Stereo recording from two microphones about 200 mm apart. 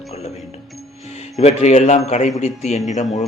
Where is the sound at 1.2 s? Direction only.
35° left (ahead or behind).